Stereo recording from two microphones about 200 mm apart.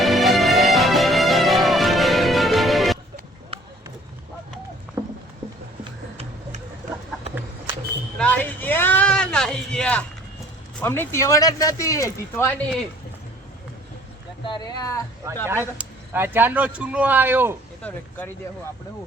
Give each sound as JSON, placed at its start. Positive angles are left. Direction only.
{"t": 0.0, "sound": "music", "side_deg": 0}
{"t": 8.2, "sound": "a sound", "side_deg": 10}
{"t": 10.8, "sound": "speech", "side_deg": 10}
{"t": 14.4, "sound": "speech", "side_deg": 20}
{"t": 15.8, "sound": "speech", "side_deg": -10}
{"t": 17.8, "sound": "speech", "side_deg": 5}